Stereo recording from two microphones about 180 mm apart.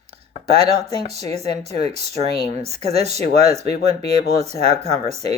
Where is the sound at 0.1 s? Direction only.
35° right (ahead or behind).